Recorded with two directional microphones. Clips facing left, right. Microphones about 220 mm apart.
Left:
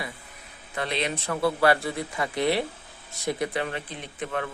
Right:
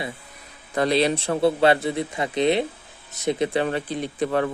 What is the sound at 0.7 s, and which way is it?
Speech, 40° right (ahead or behind).